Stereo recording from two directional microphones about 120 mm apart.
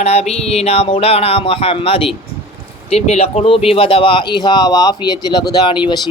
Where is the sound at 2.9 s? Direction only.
60° left (ahead or behind); by 6.0 s 40° left (ahead or behind).